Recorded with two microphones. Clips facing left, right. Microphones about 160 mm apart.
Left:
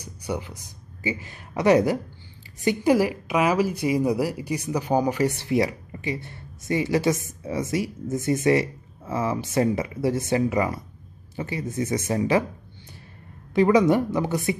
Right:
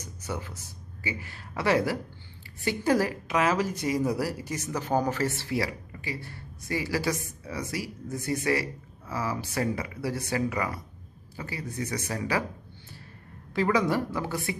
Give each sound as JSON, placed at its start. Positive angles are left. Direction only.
{"t": 0.0, "sound": "speech", "side_deg": 15}
{"t": 13.6, "sound": "speech", "side_deg": 20}